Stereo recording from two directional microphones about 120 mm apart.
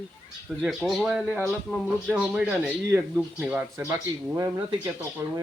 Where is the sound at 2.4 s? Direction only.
20° right (ahead or behind).